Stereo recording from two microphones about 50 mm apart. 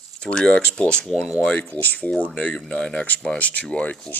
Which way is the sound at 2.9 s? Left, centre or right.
Left.